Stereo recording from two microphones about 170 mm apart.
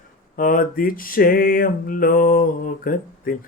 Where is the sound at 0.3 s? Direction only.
55° left (ahead or behind).